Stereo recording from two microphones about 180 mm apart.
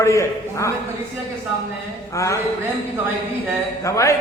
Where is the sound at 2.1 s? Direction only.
15° left (ahead or behind).